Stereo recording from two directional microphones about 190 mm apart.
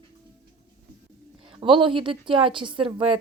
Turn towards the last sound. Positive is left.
turn(degrees=-30)  # may be behind; listen again after turning